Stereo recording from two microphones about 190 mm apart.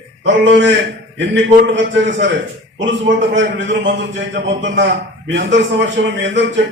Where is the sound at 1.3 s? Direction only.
70° right (ahead or behind).